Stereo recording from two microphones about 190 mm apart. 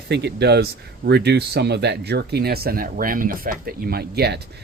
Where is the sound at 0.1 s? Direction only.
60° right (ahead or behind).